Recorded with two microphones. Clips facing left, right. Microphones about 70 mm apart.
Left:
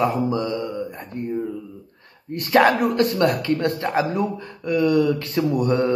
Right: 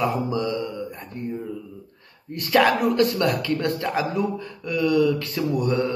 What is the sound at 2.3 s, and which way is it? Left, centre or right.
Speech, left.